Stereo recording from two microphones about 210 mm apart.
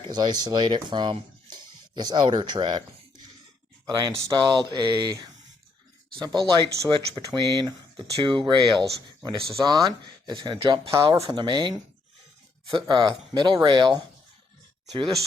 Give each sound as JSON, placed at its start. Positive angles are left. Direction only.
{"t": 0.1, "sound": "speech", "side_deg": -20}